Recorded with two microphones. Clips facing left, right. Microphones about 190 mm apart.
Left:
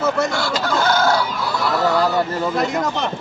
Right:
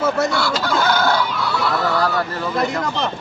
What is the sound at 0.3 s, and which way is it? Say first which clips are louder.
Speech: right 2 dB; 45° left (ahead or behind).